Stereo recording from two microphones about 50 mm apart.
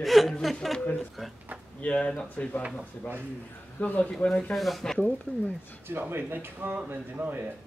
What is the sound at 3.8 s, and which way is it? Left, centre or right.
Speech, left.